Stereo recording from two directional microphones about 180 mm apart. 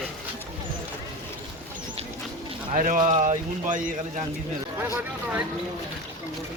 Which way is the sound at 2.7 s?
45° right (ahead or behind).